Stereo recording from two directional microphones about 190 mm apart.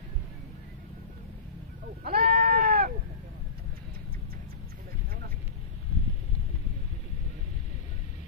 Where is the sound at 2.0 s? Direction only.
50° right (ahead or behind).